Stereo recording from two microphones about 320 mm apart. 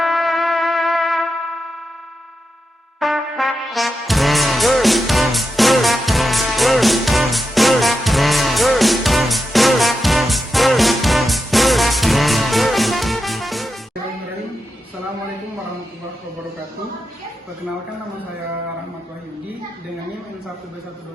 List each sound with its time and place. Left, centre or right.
0.0 s music: centre
3.0 s music: centre